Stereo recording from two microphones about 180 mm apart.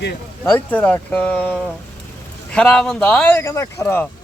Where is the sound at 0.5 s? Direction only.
10° left (ahead or behind).